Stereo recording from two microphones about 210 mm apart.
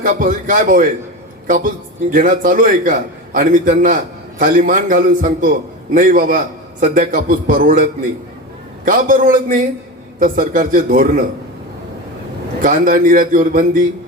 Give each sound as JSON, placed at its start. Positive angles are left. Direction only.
{"t": 0.0, "sound": "a man's voice", "side_deg": -40}
{"t": 12.6, "sound": "a man's voice", "side_deg": -40}